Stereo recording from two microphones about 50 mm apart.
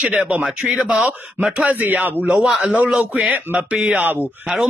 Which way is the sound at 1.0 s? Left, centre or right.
Right.